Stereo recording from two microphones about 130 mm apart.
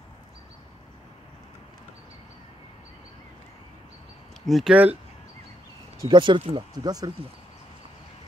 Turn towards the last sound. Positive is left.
turn(degrees=-30)  # may be behind; listen again after turning